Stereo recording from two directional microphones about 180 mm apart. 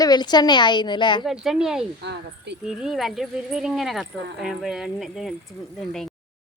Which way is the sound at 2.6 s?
5° right (ahead or behind).